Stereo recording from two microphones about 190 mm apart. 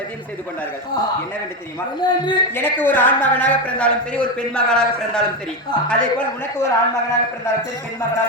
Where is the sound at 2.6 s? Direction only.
10° left (ahead or behind).